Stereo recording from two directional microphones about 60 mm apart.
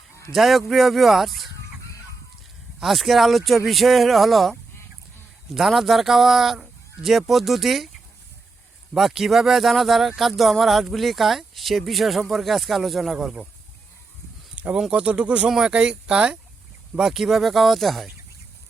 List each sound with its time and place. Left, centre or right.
0.3 s speech: centre
2.8 s speech: centre
5.5 s speech: centre
9.0 s speech: centre
14.5 s speech: centre